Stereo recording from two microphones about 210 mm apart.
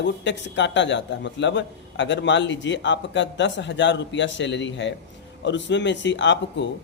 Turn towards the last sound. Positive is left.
turn(degrees=60)  # may be behind; listen again after turning